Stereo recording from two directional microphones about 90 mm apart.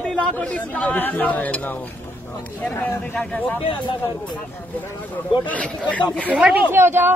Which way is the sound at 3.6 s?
70° left (ahead or behind).